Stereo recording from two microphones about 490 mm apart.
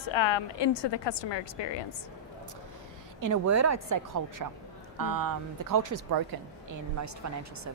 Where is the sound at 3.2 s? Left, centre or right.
Right.